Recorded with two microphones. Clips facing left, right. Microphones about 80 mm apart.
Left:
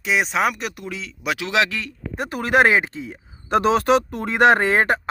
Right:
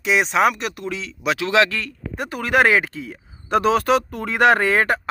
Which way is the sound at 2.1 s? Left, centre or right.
Left.